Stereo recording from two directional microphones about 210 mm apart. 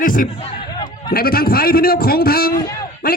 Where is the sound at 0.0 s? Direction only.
40° left (ahead or behind).